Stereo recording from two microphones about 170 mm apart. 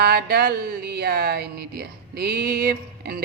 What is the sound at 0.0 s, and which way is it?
Speech, 70° right (ahead or behind).